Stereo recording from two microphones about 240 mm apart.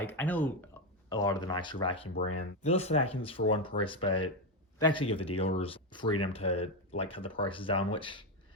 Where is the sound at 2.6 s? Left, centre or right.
Left.